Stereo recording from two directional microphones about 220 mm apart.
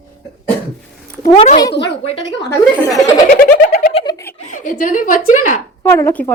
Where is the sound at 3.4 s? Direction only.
45° left (ahead or behind).